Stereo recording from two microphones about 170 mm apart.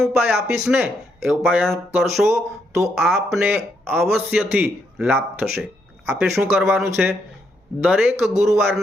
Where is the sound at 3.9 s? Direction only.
Centre (ahead or behind); by 6.3 s 15° right (ahead or behind).